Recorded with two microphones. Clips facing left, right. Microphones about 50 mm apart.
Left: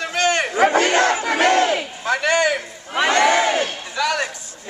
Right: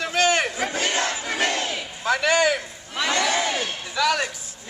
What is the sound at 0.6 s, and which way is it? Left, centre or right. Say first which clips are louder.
Battle cry: left 9 dB; left.